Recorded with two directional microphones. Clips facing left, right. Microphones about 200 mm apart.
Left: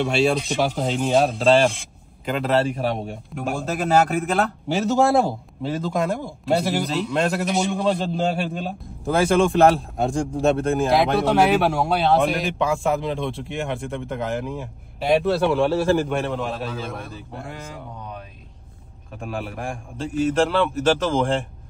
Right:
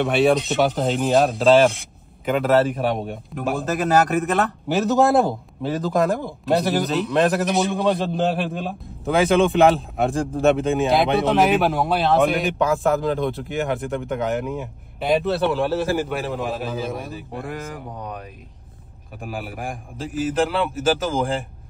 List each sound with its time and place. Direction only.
0.0 s a man's voice: centre (ahead or behind)
19.2 s a man's voice: 5° right (ahead or behind)